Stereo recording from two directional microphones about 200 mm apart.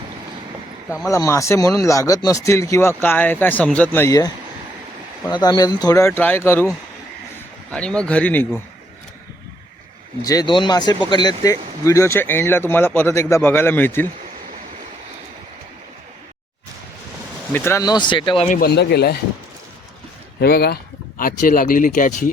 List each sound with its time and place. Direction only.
0.9 s speech: centre (ahead or behind)
1.1 s speech: 15° left (ahead or behind)
5.3 s speech: 20° left (ahead or behind)
7.7 s speech: 5° left (ahead or behind)
10.2 s speech: 20° left (ahead or behind)
17.5 s speech: 10° left (ahead or behind)
18.4 s speech: 45° left (ahead or behind)
20.4 s speech: 50° left (ahead or behind)